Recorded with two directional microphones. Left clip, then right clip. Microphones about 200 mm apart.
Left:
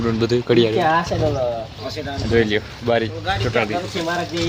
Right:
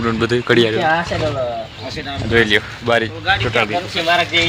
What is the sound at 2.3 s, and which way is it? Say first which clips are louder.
Speech: right 4 dB; centre (ahead or behind).